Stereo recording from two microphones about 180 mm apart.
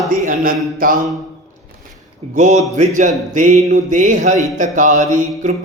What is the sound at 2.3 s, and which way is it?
Speech, 40° right (ahead or behind).